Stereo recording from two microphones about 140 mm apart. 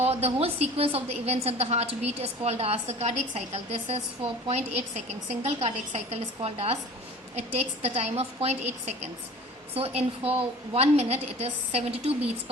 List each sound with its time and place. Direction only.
0.0 s a woman's voice: 45° right (ahead or behind)
9.7 s a woman's voice: 45° right (ahead or behind)